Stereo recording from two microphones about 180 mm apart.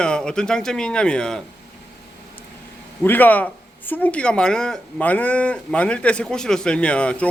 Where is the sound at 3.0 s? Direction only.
10° left (ahead or behind).